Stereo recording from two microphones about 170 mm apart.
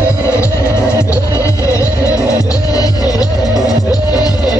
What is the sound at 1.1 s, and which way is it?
Music, 20° left (ahead or behind).